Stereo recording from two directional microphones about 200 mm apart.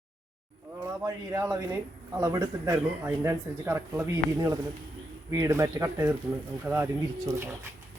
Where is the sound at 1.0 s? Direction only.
15° right (ahead or behind).